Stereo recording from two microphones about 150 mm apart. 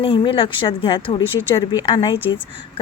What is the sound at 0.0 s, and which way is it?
Speech, 35° left (ahead or behind).